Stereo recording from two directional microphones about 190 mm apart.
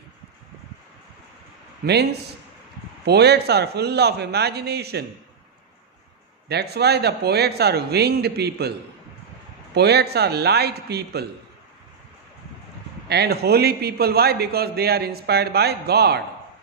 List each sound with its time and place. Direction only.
1.9 s a man's voice: 60° right (ahead or behind)
6.5 s a man's voice: 60° right (ahead or behind)
9.8 s a man's voice: 60° right (ahead or behind)
13.1 s a man's voice: 60° right (ahead or behind)